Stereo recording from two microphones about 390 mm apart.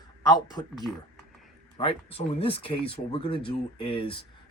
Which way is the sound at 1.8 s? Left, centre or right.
Centre.